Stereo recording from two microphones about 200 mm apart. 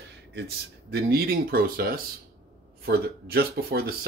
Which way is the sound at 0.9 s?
50° right (ahead or behind).